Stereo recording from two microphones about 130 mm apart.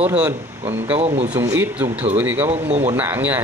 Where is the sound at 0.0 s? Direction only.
10° right (ahead or behind).